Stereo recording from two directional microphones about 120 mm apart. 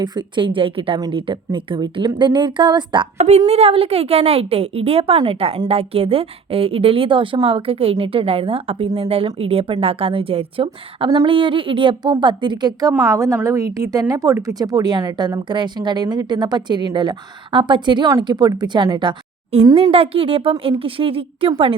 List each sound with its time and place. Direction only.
0.0 s a woman's voice: 35° right (ahead or behind)
3.2 s a woman's voice: 65° right (ahead or behind); by 12.9 s 35° right (ahead or behind)
13.1 s a woman's voice: 25° right (ahead or behind); by 21.8 s 50° right (ahead or behind)